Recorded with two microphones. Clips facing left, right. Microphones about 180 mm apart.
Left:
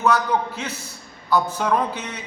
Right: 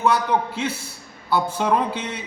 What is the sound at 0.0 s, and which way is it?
A man's voice, 30° right (ahead or behind).